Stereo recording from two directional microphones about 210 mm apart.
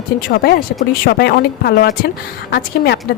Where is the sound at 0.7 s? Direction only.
50° left (ahead or behind).